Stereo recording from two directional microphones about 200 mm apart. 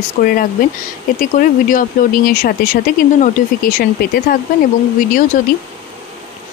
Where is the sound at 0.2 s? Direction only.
45° left (ahead or behind).